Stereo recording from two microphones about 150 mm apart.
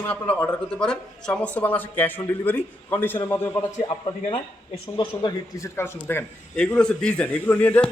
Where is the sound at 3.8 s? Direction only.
35° left (ahead or behind).